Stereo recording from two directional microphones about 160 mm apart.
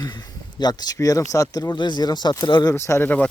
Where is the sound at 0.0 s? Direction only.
25° left (ahead or behind).